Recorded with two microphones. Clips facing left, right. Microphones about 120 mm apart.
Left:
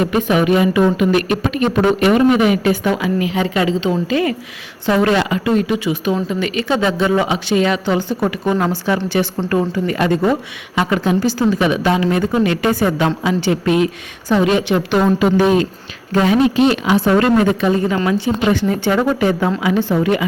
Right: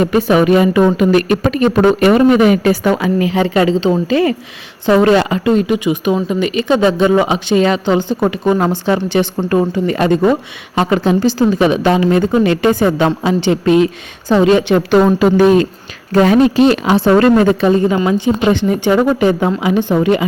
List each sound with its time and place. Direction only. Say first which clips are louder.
0.0 s speech: right 4 dB; 35° right (ahead or behind)
5.5 s a woman's voice: right 3 dB; 20° right (ahead or behind)